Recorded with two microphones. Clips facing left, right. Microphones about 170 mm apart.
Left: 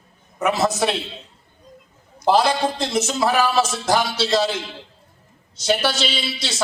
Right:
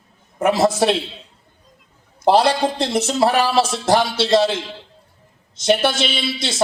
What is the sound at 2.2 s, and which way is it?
Speech, 60° right (ahead or behind).